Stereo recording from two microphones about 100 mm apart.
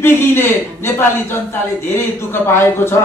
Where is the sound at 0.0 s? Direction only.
25° left (ahead or behind).